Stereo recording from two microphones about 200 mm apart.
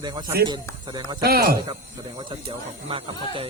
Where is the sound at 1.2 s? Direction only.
50° right (ahead or behind).